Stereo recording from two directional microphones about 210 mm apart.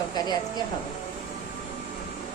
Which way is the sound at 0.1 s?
20° left (ahead or behind).